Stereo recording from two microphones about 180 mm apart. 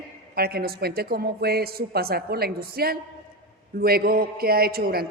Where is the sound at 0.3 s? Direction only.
60° right (ahead or behind).